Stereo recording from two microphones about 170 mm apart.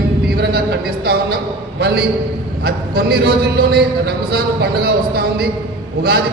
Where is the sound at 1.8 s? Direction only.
70° right (ahead or behind).